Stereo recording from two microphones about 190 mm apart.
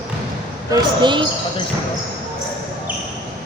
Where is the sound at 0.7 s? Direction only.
25° right (ahead or behind).